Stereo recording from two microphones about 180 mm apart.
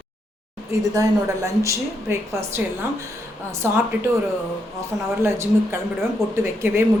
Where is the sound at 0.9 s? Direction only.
20° right (ahead or behind).